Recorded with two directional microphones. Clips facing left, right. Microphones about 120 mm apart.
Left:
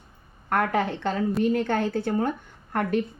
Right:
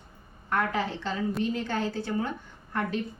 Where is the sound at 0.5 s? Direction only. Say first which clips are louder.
Left 4 dB; 55° left (ahead or behind).